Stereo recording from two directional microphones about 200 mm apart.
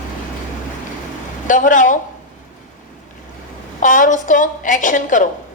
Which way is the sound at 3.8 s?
40° left (ahead or behind).